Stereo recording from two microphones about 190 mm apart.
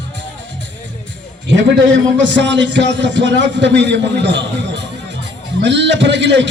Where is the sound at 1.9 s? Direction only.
70° right (ahead or behind).